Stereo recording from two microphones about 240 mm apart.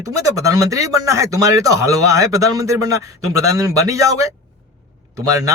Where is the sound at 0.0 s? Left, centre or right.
Centre.